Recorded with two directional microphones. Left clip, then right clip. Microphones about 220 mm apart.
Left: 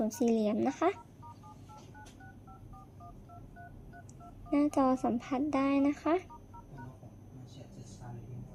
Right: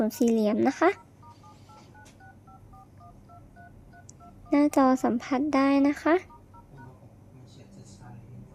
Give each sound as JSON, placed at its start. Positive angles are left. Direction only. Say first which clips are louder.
{"t": 0.2, "sound": "speech", "louder": "right 6 dB", "side_deg": -15}
{"t": 4.4, "sound": "speech", "louder": "right 7 dB", "side_deg": -20}